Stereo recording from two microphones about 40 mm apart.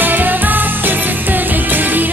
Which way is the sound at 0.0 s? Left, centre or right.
Right.